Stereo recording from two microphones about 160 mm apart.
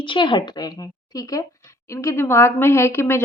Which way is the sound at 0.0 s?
30° left (ahead or behind).